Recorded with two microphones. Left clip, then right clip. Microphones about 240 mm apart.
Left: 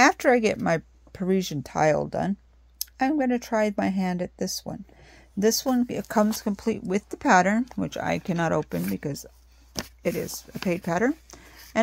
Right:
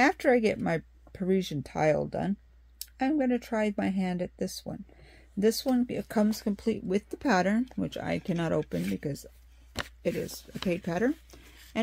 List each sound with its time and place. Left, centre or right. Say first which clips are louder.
0.0 s speech: left 5 dB; left